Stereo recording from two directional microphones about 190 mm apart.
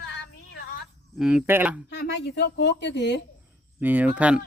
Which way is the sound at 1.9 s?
60° left (ahead or behind).